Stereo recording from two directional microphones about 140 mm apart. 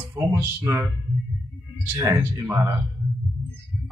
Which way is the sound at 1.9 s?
20° right (ahead or behind).